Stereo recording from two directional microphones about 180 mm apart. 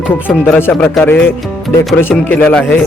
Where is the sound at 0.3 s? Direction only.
10° left (ahead or behind).